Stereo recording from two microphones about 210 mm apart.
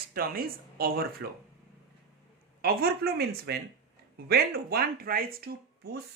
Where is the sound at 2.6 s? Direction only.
45° right (ahead or behind).